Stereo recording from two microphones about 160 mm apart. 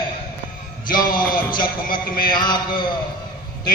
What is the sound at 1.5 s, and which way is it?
Speech, 60° left (ahead or behind).